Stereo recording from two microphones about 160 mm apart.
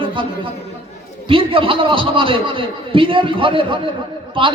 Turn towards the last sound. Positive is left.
turn(degrees=-30)  # may be behind; listen again after turning